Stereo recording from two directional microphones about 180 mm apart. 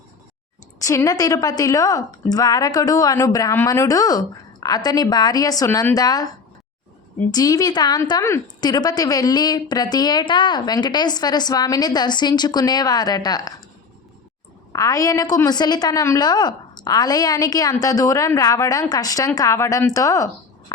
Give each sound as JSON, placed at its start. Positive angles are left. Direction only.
{"t": 0.8, "sound": "a woman's voice", "side_deg": 15}
{"t": 7.3, "sound": "a woman's voice", "side_deg": 20}
{"t": 14.7, "sound": "a woman's voice", "side_deg": 20}